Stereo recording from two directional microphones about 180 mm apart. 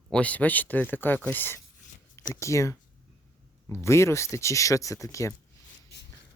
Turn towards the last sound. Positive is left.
turn(degrees=15)  # may be behind; listen again after turning